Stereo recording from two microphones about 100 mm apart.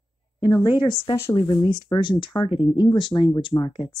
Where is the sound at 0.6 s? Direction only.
55° left (ahead or behind).